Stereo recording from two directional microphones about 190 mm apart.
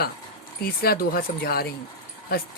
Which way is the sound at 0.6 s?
55° left (ahead or behind).